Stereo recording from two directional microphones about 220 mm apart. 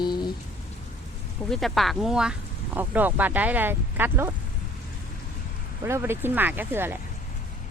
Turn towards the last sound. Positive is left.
turn(degrees=-10)  # may be behind; listen again after turning